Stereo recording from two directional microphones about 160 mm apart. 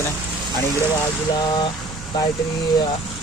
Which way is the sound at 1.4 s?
30° left (ahead or behind).